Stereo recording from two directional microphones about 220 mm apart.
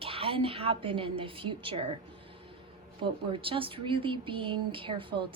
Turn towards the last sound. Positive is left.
turn(degrees=-20)  # may be behind; listen again after turning